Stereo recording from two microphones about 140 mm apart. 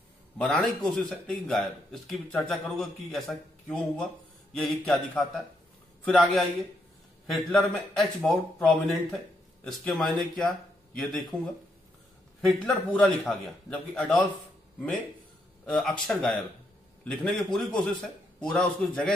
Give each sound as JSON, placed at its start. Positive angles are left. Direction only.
{"t": 0.4, "sound": "a man's voice", "side_deg": 10}
{"t": 12.4, "sound": "a man's voice", "side_deg": 5}
{"t": 15.6, "sound": "a man's voice", "side_deg": 5}